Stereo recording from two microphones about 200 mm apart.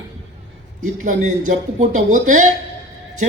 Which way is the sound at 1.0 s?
40° right (ahead or behind).